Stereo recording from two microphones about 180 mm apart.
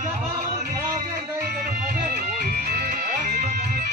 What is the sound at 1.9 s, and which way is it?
Music, 55° right (ahead or behind).